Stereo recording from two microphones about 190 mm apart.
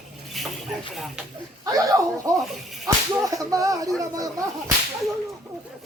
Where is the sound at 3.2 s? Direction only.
20° right (ahead or behind).